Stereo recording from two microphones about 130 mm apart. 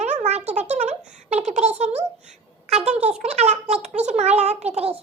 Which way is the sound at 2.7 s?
60° right (ahead or behind).